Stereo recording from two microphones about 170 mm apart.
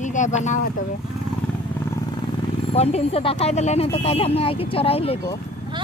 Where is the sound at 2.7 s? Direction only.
40° left (ahead or behind).